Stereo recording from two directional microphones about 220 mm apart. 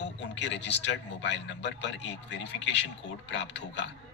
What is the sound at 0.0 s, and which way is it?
A man's voice, 55° left (ahead or behind).